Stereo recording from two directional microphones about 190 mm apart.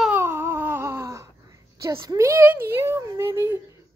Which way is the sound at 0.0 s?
10° right (ahead or behind).